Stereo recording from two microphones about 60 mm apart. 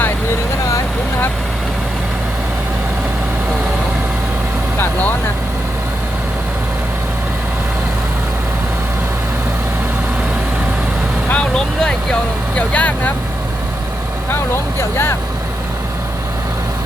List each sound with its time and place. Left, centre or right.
4.8 s vehicle: left
11.5 s vehicle: centre
12.5 s vehicle: left
14.3 s vehicle: left